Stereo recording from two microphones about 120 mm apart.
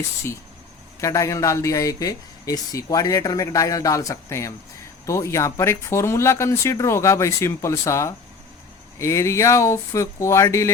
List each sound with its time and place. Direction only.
1.0 s speech: 25° left (ahead or behind)